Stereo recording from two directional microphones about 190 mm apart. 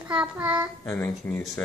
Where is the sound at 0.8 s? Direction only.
10° left (ahead or behind).